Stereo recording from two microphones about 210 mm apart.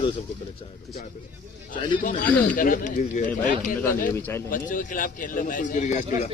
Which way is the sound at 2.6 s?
40° left (ahead or behind).